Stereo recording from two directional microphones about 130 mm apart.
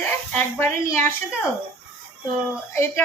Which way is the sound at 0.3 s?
20° left (ahead or behind).